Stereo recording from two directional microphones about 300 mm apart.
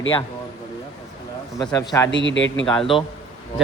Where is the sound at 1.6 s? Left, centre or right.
Centre.